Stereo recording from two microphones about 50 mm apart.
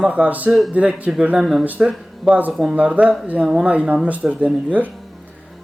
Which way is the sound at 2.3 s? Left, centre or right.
Right.